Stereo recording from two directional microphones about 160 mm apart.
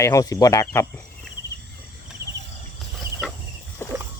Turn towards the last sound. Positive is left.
turn(degrees=15)  # may be behind; listen again after turning